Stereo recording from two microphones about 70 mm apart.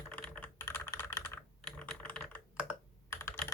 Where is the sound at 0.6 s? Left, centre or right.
Left.